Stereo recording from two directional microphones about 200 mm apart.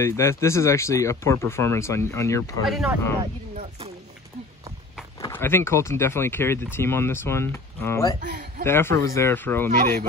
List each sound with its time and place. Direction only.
0.0 s speech: 15° left (ahead or behind)
2.6 s speech: centre (ahead or behind)
5.2 s speech: 10° left (ahead or behind)
8.2 s a man's voice: 45° right (ahead or behind)
8.6 s speech: 10° left (ahead or behind)